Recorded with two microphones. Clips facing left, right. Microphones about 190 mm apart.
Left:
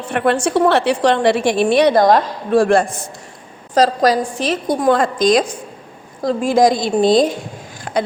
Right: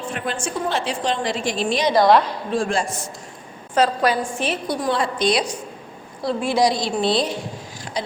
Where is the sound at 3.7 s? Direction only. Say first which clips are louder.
Left 5 dB; 40° left (ahead or behind).